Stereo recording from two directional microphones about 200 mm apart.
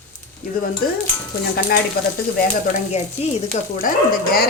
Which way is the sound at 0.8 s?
45° left (ahead or behind).